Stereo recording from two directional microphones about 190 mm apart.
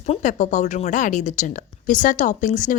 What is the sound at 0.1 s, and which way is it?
Speech, 40° left (ahead or behind).